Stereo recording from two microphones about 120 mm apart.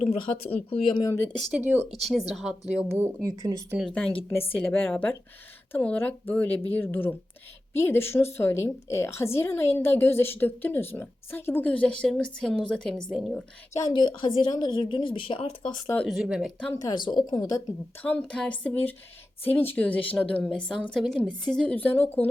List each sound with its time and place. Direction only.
0.0 s speech: 55° left (ahead or behind)
1.0 s a woman's voice: 20° left (ahead or behind)
1.5 s speech: 15° right (ahead or behind)
2.0 s speech: centre (ahead or behind)
3.2 s speech: 35° right (ahead or behind)
4.5 s a woman's voice: 15° left (ahead or behind)
13.7 s speech: 35° left (ahead or behind)
16.0 s speech: 5° right (ahead or behind)
16.7 s speech: 35° left (ahead or behind)
18.0 s a woman's voice: 10° left (ahead or behind)